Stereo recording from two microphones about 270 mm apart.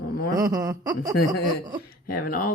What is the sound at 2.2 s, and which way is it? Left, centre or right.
Speech, left.